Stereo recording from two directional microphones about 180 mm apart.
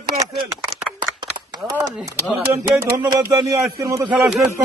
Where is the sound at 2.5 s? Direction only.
15° right (ahead or behind).